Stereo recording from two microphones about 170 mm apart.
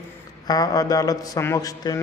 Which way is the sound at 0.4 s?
25° left (ahead or behind).